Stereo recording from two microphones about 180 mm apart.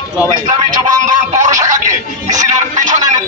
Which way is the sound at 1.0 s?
40° right (ahead or behind).